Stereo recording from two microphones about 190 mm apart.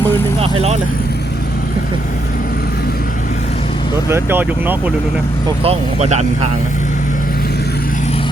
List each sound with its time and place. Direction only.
0.4 s speech: 35° right (ahead or behind)
4.1 s speech: 10° right (ahead or behind)
5.6 s speech: 35° right (ahead or behind)